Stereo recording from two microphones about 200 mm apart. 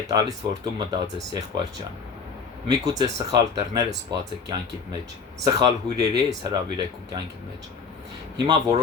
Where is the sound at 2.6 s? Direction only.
20° right (ahead or behind).